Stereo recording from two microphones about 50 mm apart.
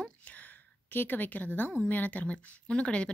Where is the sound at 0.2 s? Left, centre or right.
Left.